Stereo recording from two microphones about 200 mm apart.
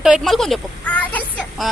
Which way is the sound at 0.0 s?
Centre (ahead or behind).